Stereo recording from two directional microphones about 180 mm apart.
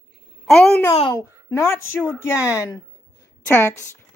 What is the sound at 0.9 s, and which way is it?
Speech, 25° left (ahead or behind).